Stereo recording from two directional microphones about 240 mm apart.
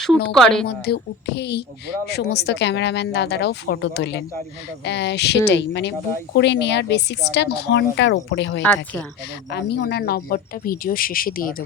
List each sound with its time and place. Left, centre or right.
0.3 s speech: centre
0.9 s speech: left
8.6 s speech: centre
9.5 s speech: left